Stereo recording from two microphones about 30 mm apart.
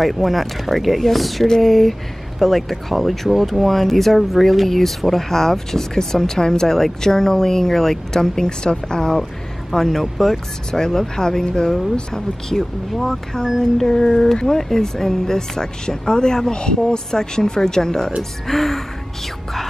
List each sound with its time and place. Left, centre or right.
0.0 s speech: centre; by 9.2 s left
9.8 s speech: centre
12.9 s speech: centre
13.8 s speech: centre
18.5 s speech: centre